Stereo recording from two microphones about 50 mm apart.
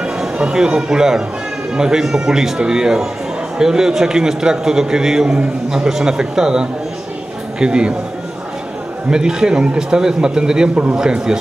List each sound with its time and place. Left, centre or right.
0.0 s a man's voice: centre
9.1 s a man's voice: centre